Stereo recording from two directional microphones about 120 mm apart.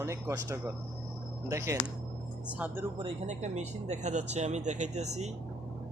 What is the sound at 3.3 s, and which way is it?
Speech, 75° right (ahead or behind).